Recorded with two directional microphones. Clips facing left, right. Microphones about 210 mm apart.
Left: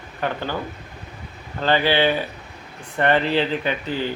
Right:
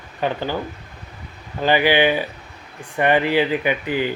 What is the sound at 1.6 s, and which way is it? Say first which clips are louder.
Speech: right 2 dB; 15° right (ahead or behind).